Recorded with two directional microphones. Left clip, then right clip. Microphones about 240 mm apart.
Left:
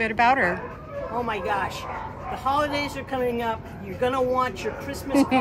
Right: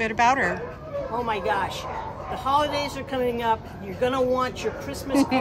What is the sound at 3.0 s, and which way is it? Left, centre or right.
Speech, centre.